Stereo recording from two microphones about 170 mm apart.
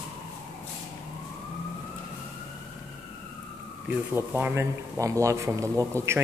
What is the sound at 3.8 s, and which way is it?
Speech, 10° right (ahead or behind).